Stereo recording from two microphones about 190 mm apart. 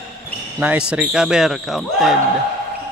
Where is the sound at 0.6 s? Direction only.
5° right (ahead or behind).